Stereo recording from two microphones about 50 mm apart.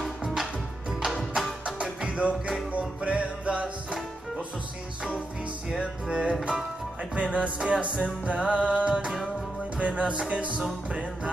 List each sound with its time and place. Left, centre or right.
0.2 s music: centre
1.8 s music: right
5.8 s music: centre